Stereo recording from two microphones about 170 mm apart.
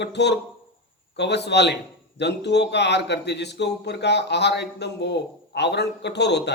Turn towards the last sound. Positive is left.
turn(degrees=85)